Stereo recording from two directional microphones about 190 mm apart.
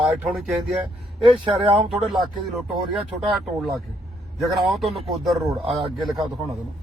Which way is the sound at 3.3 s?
Centre (ahead or behind).